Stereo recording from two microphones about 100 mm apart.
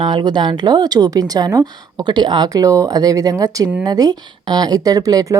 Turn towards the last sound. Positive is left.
turn(degrees=-35)  # may be behind; listen again after turning